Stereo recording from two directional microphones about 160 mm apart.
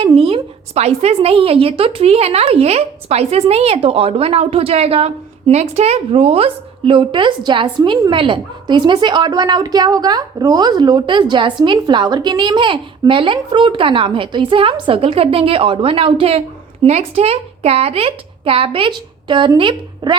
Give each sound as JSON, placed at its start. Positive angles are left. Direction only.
{"t": 0.1, "sound": "a woman's voice", "side_deg": -35}